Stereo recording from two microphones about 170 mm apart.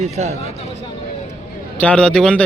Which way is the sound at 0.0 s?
40° right (ahead or behind).